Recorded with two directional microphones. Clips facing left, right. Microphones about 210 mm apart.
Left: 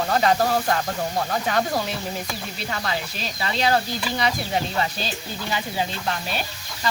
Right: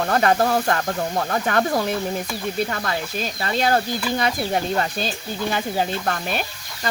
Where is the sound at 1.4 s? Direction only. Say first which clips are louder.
Right 3 dB; 55° right (ahead or behind).